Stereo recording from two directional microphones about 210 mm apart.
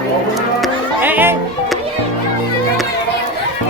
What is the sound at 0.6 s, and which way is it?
Music, 10° right (ahead or behind).